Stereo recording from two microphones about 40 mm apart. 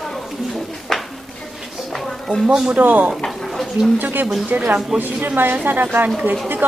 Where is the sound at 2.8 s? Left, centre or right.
Right.